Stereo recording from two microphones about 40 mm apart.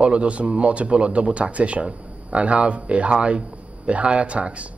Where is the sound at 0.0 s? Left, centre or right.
Right.